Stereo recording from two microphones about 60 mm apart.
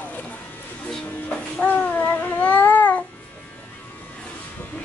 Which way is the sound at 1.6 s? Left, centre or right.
Left.